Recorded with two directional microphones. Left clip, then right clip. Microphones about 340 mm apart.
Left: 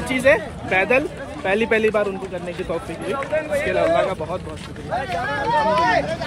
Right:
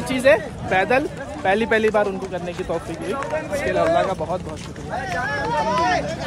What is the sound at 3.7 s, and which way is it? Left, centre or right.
Speech, centre.